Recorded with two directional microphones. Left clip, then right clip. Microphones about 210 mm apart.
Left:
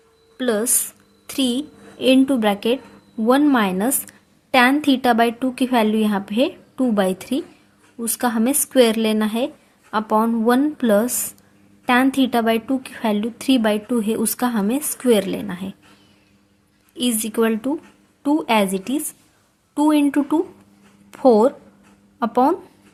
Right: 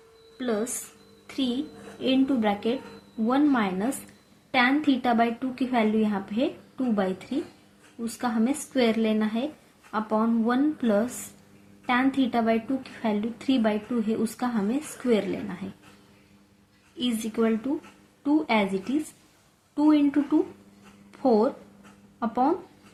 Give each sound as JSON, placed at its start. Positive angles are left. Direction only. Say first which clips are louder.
{"t": 0.3, "sound": "a woman's voice", "louder": "left 8 dB", "side_deg": 50}
{"t": 2.0, "sound": "a woman's voice", "louder": "left 9 dB", "side_deg": 50}
{"t": 17.0, "sound": "a woman's voice", "louder": "left 7 dB", "side_deg": 50}